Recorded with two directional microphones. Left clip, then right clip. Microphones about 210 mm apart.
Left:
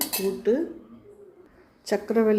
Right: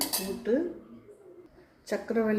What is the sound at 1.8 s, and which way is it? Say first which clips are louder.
Speech: left 6 dB; 45° left (ahead or behind).